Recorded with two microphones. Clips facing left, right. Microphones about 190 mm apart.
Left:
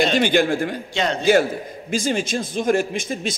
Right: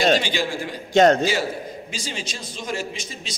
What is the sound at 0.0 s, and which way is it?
Speech, 55° left (ahead or behind).